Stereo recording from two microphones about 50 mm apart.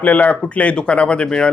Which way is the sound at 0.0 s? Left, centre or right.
Left.